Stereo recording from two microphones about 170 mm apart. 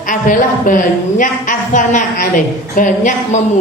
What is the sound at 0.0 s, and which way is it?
A woman's voice, 50° left (ahead or behind).